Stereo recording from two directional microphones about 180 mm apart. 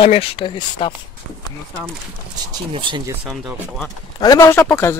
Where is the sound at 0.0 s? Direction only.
30° left (ahead or behind).